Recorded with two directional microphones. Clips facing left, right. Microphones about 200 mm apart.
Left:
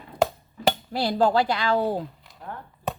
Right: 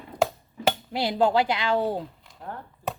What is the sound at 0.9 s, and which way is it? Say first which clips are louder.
Speech: left 1 dB; 20° right (ahead or behind).